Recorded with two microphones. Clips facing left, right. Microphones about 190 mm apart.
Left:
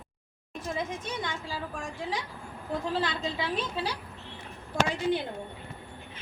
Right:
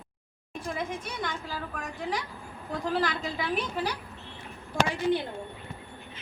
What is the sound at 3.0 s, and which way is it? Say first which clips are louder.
Speech: right 1 dB; 25° left (ahead or behind).